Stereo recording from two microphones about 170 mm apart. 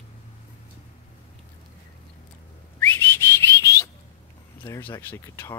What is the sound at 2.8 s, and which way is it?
Whistling, 10° left (ahead or behind).